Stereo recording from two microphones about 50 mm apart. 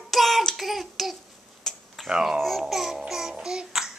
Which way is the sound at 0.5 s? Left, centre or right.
Centre.